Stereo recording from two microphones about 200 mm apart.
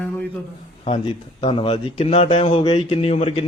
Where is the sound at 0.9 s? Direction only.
25° left (ahead or behind).